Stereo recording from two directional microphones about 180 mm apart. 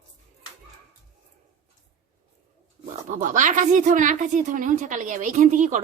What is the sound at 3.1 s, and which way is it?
A woman's voice, 45° right (ahead or behind).